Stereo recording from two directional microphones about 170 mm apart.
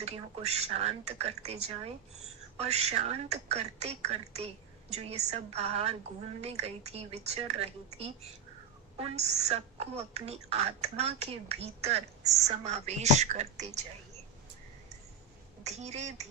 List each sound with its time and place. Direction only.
0.0 s a woman's voice: 40° right (ahead or behind)
15.6 s a woman's voice: 40° right (ahead or behind)